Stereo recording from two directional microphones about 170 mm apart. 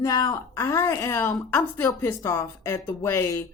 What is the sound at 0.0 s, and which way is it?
Speech, 20° left (ahead or behind).